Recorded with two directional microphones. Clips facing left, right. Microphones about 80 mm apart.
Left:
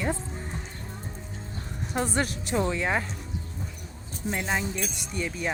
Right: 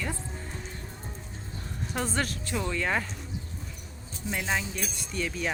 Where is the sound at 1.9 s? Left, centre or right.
Centre.